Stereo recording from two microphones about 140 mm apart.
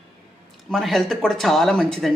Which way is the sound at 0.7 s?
Centre (ahead or behind).